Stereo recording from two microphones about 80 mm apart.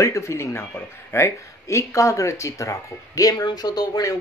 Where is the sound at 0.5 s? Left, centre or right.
Left.